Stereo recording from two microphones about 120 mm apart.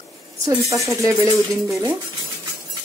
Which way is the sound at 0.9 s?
25° right (ahead or behind).